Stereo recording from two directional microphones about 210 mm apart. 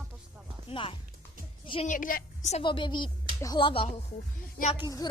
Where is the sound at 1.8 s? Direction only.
40° left (ahead or behind).